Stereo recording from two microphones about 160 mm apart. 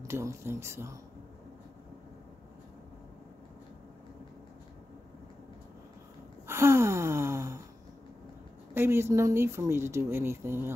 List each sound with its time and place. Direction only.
0.0 s speech: 15° right (ahead or behind)
6.4 s gasp: 15° right (ahead or behind)
8.7 s speech: 15° right (ahead or behind)